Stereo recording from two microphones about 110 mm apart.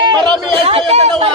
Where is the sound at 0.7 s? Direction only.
60° right (ahead or behind).